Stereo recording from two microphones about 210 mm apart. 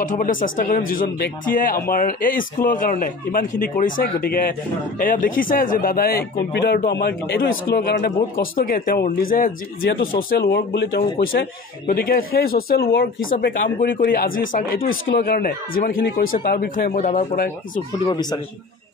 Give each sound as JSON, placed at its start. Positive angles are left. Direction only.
{"t": 0.0, "sound": "a man's voice", "side_deg": 40}